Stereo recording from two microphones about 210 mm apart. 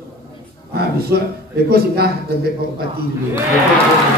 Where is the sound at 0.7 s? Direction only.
50° right (ahead or behind).